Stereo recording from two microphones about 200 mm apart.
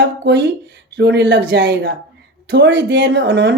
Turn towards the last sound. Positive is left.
turn(degrees=-65)  # may be behind; listen again after turning